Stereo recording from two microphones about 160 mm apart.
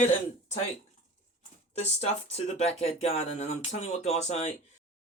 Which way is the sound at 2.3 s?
40° left (ahead or behind).